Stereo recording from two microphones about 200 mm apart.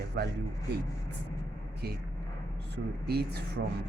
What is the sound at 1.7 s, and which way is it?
Vehicle, 50° right (ahead or behind).